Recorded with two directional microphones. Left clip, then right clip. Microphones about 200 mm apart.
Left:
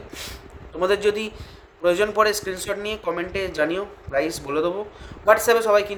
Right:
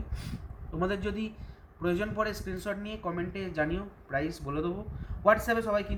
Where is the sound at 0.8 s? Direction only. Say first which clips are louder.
Left 12 dB; 55° left (ahead or behind).